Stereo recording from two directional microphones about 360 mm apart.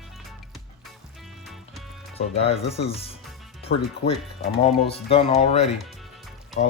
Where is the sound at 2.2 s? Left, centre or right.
Centre.